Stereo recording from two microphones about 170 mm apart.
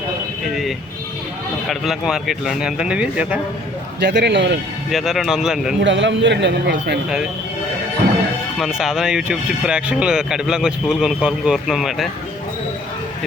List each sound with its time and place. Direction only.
1.7 s speech: centre (ahead or behind)
4.0 s speech: 90° right
4.9 s speech: centre (ahead or behind)
5.8 s speech: 90° right
8.5 s speech: centre (ahead or behind)